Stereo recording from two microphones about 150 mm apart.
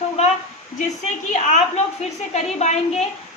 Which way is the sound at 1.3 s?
50° left (ahead or behind).